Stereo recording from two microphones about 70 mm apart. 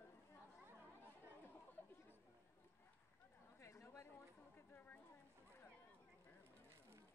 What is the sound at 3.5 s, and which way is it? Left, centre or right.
Chatter, left.